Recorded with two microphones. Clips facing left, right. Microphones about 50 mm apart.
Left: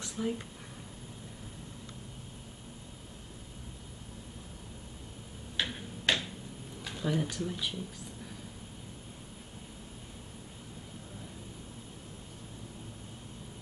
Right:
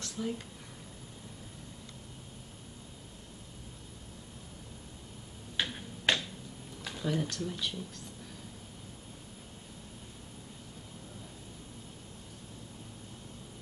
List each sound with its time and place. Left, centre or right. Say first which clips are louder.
0.0 s a sound: left 2 dB; centre
5.7 s finger snapping: right 1 dB; centre
6.8 s speech: left 1 dB; centre